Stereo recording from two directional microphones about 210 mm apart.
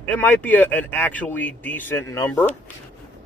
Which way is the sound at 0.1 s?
10° left (ahead or behind).